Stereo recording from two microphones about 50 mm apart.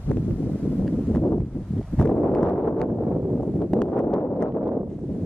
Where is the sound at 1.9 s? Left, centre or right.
Centre.